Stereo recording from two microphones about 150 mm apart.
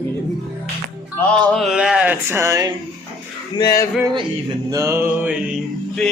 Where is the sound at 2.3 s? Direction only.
20° right (ahead or behind).